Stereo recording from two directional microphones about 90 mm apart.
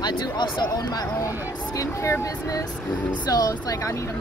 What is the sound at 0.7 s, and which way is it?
Speech, 45° left (ahead or behind).